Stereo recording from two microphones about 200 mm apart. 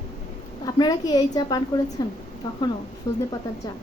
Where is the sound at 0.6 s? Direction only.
20° left (ahead or behind).